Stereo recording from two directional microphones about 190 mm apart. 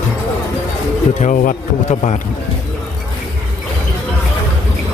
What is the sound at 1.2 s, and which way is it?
A man's voice, 40° left (ahead or behind).